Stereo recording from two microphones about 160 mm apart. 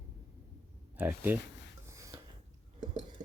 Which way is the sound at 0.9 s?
10° right (ahead or behind).